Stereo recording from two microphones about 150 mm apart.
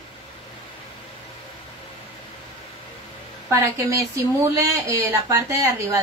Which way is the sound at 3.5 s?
20° right (ahead or behind).